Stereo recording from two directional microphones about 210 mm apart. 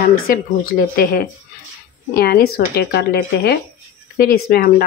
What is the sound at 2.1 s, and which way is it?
Speech, 45° left (ahead or behind).